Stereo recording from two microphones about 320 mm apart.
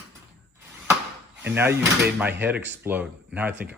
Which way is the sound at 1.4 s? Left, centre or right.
Centre.